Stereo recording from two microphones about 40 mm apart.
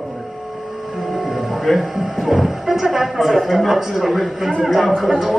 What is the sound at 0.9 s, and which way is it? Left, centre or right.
Speech, centre.